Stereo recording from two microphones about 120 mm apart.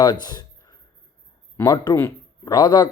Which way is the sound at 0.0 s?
35° left (ahead or behind).